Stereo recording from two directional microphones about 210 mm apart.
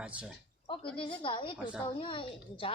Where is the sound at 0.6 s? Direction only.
25° left (ahead or behind).